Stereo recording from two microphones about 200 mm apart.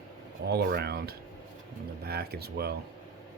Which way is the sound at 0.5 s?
55° right (ahead or behind).